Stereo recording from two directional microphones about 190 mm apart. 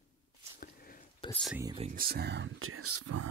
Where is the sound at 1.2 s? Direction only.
25° left (ahead or behind).